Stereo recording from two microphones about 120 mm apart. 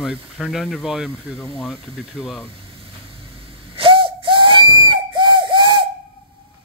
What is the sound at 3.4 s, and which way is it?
Whistle, 45° right (ahead or behind).